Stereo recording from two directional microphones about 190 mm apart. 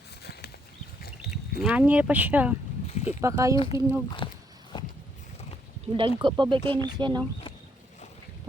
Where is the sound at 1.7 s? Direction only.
5° right (ahead or behind).